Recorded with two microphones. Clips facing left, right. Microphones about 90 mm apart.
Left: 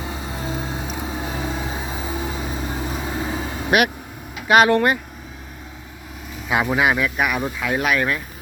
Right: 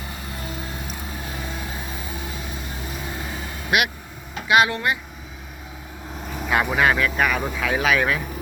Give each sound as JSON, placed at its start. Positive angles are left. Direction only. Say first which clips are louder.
{"t": 0.0, "sound": "vehicle", "louder": "left 5 dB", "side_deg": 20}
{"t": 4.4, "sound": "speech", "louder": "left 4 dB", "side_deg": 45}
{"t": 6.5, "sound": "speech", "louder": "left 1 dB", "side_deg": 15}